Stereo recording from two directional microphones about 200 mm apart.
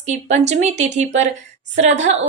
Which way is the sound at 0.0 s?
35° right (ahead or behind).